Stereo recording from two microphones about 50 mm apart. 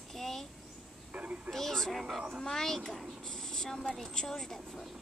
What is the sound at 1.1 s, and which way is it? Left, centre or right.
Speech, right.